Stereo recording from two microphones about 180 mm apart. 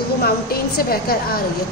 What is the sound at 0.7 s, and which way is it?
Speech, 55° left (ahead or behind).